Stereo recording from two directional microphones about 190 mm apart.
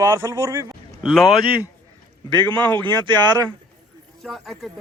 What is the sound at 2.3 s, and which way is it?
Speech, 25° right (ahead or behind).